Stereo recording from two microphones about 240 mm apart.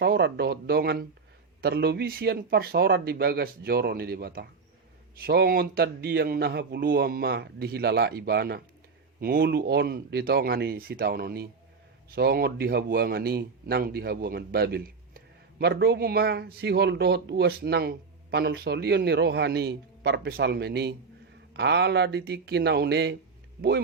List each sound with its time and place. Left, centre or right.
0.0 s a man's voice: right